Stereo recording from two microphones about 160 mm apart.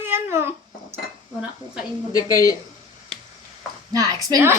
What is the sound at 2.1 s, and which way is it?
Speech, 20° left (ahead or behind).